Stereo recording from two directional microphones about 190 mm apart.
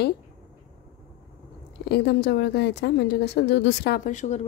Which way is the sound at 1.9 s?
60° left (ahead or behind).